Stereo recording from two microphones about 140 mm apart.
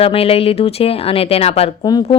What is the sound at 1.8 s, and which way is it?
Speech, 30° left (ahead or behind).